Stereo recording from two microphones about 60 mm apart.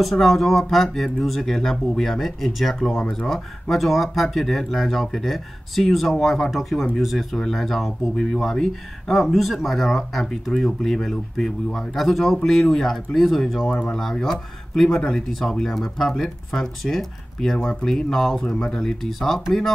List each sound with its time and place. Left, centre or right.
0.0 s speech: centre
13.7 s speech: centre
13.9 s speech: centre